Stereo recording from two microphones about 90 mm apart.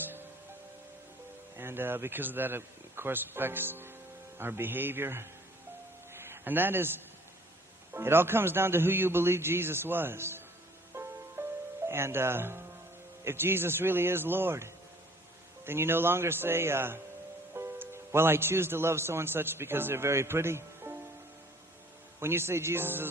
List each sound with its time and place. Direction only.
1.5 s a man's voice: 25° right (ahead or behind)
6.1 s a sound: 25° right (ahead or behind)
7.9 s a man's voice: 25° right (ahead or behind)
10.9 s music: 30° right (ahead or behind)
11.9 s a man's voice: 30° right (ahead or behind)
22.2 s a man's voice: 30° right (ahead or behind)